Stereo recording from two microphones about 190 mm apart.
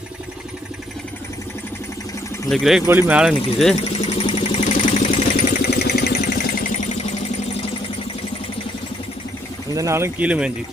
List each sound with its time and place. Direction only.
2.5 s speech: centre (ahead or behind)
2.8 s speech: 10° right (ahead or behind)
4.2 s a sound: 30° left (ahead or behind)
4.6 s vehicle: 40° left (ahead or behind); by 6.7 s 55° left (ahead or behind)
9.7 s speech: 15° right (ahead or behind)